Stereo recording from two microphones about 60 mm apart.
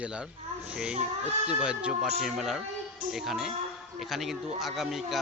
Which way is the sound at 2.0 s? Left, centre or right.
Centre.